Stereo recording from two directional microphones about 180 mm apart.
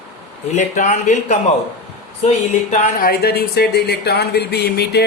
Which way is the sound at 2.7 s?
55° left (ahead or behind).